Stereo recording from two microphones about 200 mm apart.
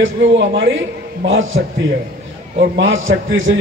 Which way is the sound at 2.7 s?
70° right (ahead or behind).